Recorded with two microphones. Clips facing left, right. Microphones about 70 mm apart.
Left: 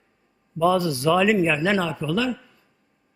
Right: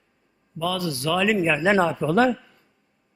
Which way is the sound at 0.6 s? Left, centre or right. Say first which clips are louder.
Left 6 dB; left.